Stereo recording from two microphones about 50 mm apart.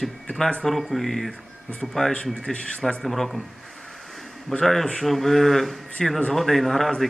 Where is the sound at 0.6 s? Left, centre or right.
Centre.